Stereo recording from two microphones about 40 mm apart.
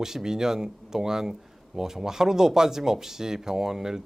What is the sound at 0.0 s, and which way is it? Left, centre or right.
Speech, centre.